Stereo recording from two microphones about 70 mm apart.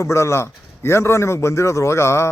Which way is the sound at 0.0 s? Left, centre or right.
Left.